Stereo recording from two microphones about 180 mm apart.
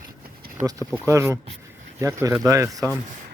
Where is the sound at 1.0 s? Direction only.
15° right (ahead or behind).